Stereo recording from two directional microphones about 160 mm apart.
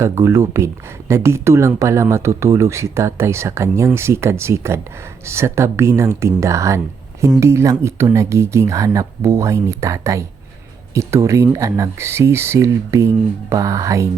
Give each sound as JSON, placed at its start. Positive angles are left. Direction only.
{"t": 0.0, "sound": "speech", "side_deg": -15}